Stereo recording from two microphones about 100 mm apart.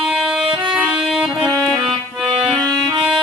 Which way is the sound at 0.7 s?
15° right (ahead or behind).